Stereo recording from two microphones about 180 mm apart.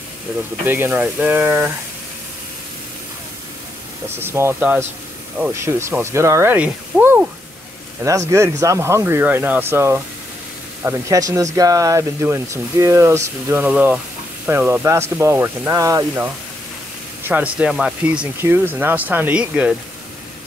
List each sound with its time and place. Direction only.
0.7 s speech: 10° right (ahead or behind)
4.2 s speech: 15° right (ahead or behind)
17.3 s speech: 5° right (ahead or behind)